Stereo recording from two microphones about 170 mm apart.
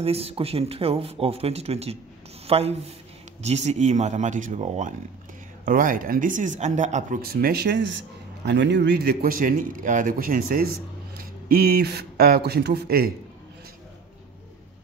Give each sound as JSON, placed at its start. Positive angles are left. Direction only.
{"t": 0.0, "sound": "a man's voice", "side_deg": -35}